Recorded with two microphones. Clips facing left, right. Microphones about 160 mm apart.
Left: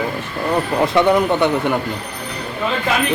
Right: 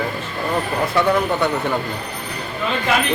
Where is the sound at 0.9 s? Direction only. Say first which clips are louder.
Left 3 dB; 20° left (ahead or behind).